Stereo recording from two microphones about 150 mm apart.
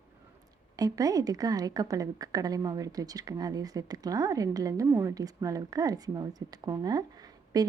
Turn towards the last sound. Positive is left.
turn(degrees=-25)  # may be behind; listen again after turning